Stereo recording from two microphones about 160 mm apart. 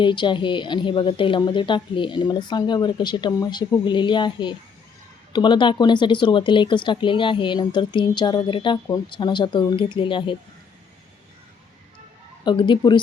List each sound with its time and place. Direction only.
0.0 s speech: 30° left (ahead or behind)
12.5 s speech: 30° left (ahead or behind)